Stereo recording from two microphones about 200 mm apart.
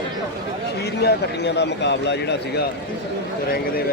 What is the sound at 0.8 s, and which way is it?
A man's voice, 55° left (ahead or behind).